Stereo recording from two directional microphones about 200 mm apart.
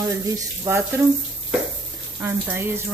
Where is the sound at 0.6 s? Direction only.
10° right (ahead or behind).